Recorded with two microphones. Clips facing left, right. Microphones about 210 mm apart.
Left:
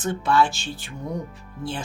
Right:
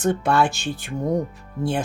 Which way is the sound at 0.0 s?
60° right (ahead or behind).